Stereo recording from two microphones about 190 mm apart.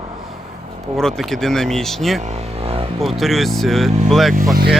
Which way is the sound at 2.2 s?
35° right (ahead or behind).